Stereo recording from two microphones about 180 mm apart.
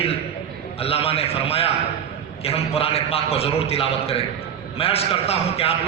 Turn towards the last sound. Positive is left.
turn(degrees=35)  # may be behind; listen again after turning